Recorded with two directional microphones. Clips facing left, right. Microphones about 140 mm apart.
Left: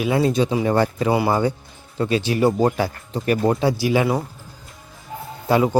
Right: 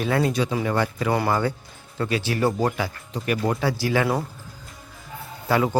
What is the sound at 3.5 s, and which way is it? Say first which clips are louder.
Speech: left 4 dB; 20° left (ahead or behind).